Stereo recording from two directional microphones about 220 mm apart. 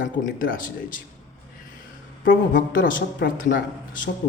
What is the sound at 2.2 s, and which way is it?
Speech, 40° left (ahead or behind).